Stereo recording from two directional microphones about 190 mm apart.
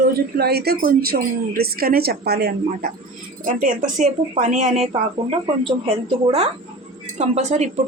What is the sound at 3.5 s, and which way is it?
Speech, 45° right (ahead or behind).